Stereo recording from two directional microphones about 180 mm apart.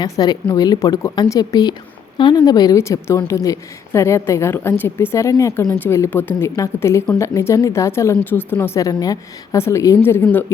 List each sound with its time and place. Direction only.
0.0 s a woman's voice: 20° left (ahead or behind)